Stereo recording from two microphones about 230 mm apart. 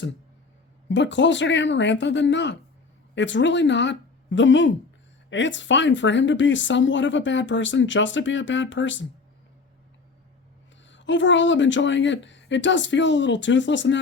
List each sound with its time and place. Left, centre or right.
0.9 s speech: left
10.8 s speech: left